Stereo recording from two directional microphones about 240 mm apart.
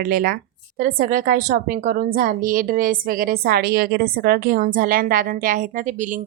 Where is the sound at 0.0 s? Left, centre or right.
Right.